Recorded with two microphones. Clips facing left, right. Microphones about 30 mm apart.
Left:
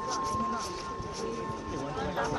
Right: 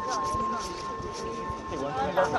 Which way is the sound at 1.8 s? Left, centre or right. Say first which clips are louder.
Right 8 dB; centre.